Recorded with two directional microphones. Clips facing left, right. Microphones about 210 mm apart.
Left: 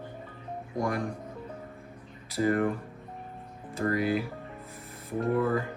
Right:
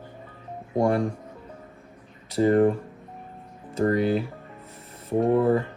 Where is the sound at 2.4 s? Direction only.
30° right (ahead or behind).